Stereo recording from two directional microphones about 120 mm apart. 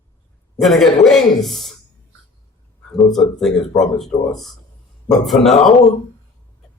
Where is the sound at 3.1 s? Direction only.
5° left (ahead or behind).